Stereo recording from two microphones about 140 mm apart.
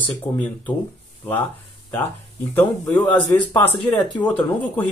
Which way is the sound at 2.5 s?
15° left (ahead or behind).